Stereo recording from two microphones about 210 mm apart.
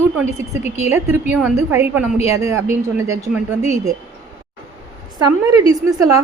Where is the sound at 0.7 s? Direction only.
30° left (ahead or behind).